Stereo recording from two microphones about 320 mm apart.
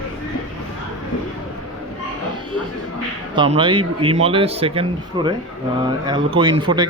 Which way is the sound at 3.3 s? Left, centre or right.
Centre.